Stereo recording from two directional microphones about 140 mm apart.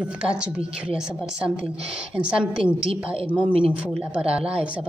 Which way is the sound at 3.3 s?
10° right (ahead or behind).